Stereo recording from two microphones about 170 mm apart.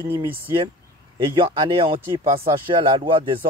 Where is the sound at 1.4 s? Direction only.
30° right (ahead or behind).